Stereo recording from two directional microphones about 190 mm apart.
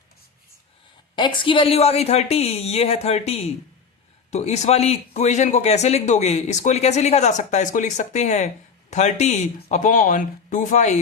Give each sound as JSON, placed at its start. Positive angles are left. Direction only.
{"t": 1.1, "sound": "speech", "side_deg": 25}